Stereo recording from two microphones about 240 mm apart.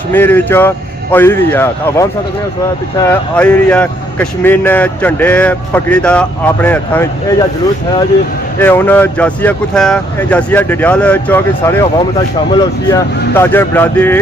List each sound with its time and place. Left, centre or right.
0.1 s speech: centre
3.1 s speech: centre
8.6 s speech: centre